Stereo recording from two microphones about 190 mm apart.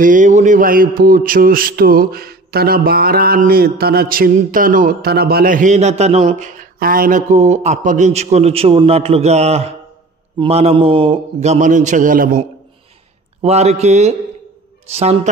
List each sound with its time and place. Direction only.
0.0 s a man's voice: 45° right (ahead or behind)